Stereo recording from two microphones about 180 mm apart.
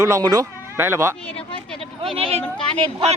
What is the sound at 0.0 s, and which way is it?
Speech, 15° right (ahead or behind).